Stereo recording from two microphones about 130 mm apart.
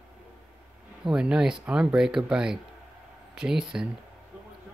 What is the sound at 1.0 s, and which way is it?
Speech, 5° right (ahead or behind).